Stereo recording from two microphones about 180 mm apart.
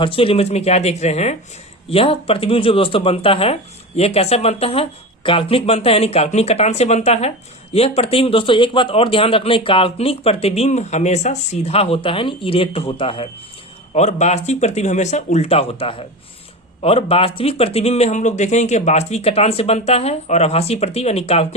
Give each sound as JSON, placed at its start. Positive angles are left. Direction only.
{"t": 0.0, "sound": "speech", "side_deg": 30}